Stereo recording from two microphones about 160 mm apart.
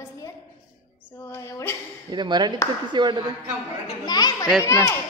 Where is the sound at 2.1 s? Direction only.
30° right (ahead or behind).